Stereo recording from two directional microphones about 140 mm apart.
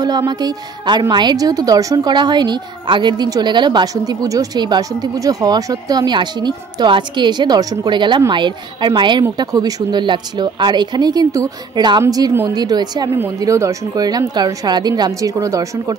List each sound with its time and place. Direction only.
0.0 s a woman's voice: 30° right (ahead or behind)